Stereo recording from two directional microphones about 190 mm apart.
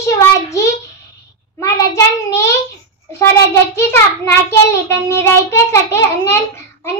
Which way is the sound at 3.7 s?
15° left (ahead or behind).